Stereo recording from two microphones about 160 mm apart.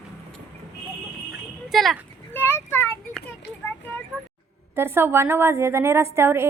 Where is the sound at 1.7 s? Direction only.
Centre (ahead or behind).